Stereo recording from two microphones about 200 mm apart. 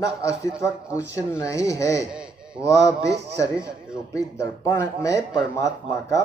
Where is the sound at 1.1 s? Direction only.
15° left (ahead or behind).